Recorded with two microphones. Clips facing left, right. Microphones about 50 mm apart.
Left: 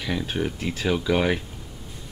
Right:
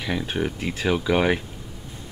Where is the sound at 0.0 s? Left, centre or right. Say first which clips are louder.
Right 1 dB; centre.